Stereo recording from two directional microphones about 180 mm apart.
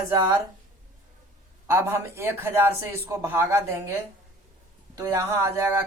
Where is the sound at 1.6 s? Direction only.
15° right (ahead or behind).